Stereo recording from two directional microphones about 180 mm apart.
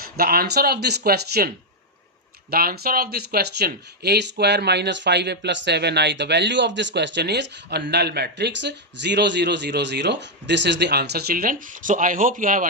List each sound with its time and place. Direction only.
0.0 s speech: 55° right (ahead or behind)
2.5 s speech: 55° right (ahead or behind)